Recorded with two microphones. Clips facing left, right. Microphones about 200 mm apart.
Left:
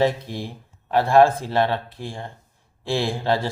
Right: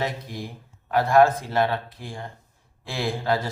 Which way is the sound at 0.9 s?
30° left (ahead or behind).